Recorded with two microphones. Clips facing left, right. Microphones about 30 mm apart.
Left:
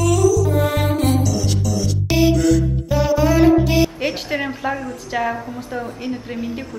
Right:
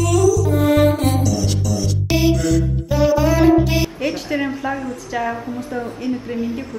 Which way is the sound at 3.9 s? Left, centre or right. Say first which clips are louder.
Right 1 dB; left.